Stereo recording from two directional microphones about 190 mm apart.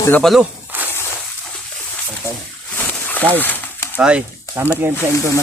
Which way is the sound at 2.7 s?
10° left (ahead or behind).